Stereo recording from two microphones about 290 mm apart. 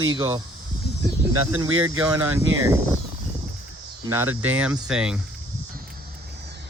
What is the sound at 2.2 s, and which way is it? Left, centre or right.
Speech, right.